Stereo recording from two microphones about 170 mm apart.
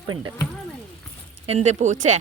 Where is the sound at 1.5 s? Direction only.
40° right (ahead or behind).